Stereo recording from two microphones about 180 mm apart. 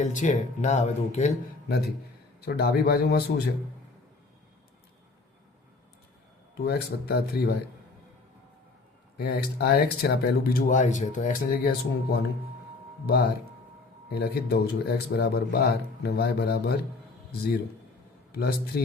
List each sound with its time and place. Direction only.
0.0 s speech: 40° left (ahead or behind)
2.4 s speech: 60° left (ahead or behind)
6.7 s speech: 60° left (ahead or behind)
9.1 s speech: 60° left (ahead or behind)
18.3 s speech: 60° left (ahead or behind)